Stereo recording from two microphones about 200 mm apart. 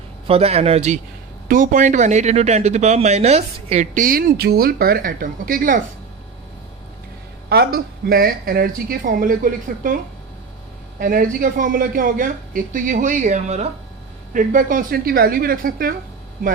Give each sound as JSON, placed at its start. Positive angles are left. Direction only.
{"t": 0.3, "sound": "speech", "side_deg": -30}
{"t": 1.5, "sound": "speech", "side_deg": -45}
{"t": 7.5, "sound": "speech", "side_deg": -50}
{"t": 11.0, "sound": "speech", "side_deg": -45}